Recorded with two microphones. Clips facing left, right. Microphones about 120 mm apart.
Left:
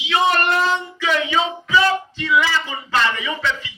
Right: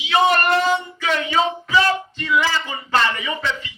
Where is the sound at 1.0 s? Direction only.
40° right (ahead or behind).